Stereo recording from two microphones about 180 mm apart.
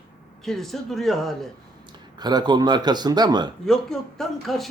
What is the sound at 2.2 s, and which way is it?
Speech, 25° right (ahead or behind).